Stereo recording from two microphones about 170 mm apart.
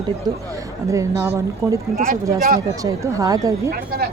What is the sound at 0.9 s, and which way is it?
Speech, 15° right (ahead or behind).